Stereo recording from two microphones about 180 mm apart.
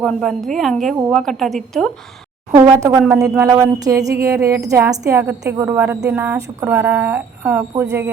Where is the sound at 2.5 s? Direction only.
20° right (ahead or behind).